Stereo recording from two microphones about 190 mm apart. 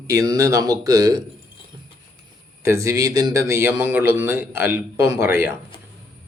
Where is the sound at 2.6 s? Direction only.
15° right (ahead or behind).